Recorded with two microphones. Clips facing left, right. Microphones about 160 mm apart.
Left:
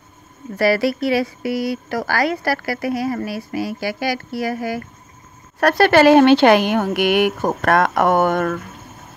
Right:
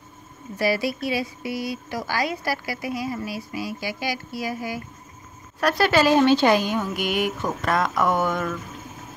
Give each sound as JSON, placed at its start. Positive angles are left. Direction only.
{"t": 0.6, "sound": "speech", "side_deg": 70}